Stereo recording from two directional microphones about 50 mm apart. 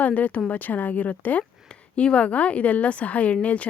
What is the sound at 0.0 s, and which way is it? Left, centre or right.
A woman's voice, left.